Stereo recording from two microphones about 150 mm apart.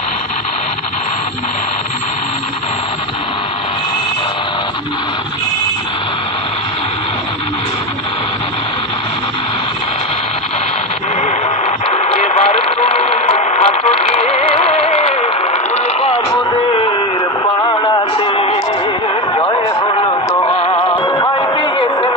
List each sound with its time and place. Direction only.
11.9 s radio: 45° left (ahead or behind)
17.6 s a sound: 30° left (ahead or behind)
20.4 s music: 40° left (ahead or behind)